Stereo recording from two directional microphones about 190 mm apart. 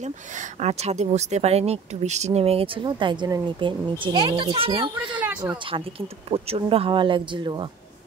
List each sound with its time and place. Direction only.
0.6 s speech: 35° right (ahead or behind)
6.3 s speech: 30° right (ahead or behind)